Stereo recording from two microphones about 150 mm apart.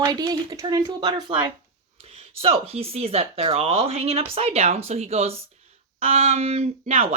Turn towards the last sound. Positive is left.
turn(degrees=-45)  # may be behind; listen again after turning